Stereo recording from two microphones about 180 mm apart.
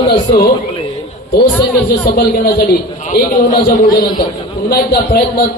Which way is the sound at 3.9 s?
20° left (ahead or behind).